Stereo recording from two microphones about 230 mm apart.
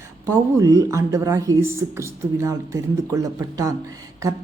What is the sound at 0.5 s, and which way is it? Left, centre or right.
Speech, centre.